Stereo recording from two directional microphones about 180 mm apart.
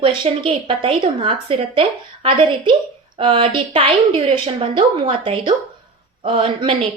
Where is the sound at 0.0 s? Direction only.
30° right (ahead or behind).